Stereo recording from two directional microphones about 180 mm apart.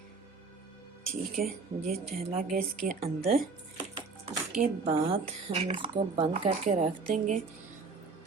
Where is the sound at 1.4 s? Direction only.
55° right (ahead or behind).